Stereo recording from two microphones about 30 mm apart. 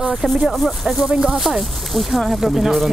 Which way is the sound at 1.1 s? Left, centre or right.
Right.